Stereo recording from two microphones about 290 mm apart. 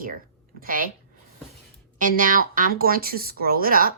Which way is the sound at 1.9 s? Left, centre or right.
Right.